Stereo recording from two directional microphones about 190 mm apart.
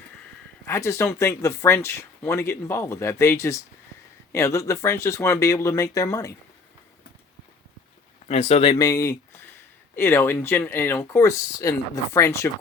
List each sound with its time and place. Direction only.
0.6 s speech: 15° left (ahead or behind)
8.3 s speech: 35° left (ahead or behind)
8.8 s speech: 15° left (ahead or behind)